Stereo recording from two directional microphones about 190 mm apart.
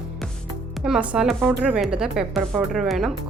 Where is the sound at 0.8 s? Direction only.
5° right (ahead or behind).